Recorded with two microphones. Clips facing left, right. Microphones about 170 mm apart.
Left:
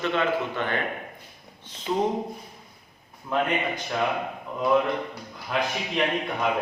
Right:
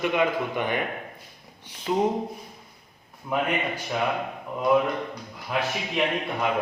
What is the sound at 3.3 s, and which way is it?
Speech, 10° right (ahead or behind).